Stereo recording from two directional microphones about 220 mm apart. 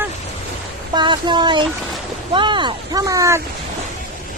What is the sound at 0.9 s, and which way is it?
Speech, 20° right (ahead or behind).